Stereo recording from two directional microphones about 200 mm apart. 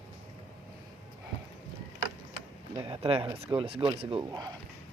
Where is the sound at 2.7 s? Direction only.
25° right (ahead or behind).